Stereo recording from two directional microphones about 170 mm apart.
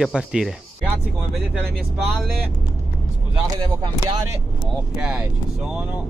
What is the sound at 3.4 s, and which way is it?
Speech, 25° right (ahead or behind).